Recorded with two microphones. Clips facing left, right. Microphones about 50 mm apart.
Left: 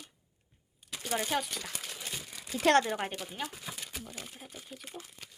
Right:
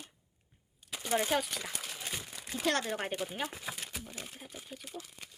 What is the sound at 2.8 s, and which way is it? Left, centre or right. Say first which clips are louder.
Speech: left 2 dB; centre.